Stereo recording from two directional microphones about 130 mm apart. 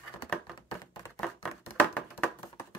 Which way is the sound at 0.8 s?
30° left (ahead or behind).